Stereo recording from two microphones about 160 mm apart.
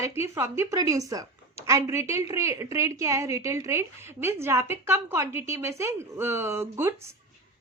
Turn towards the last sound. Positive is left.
turn(degrees=-15)  # may be behind; listen again after turning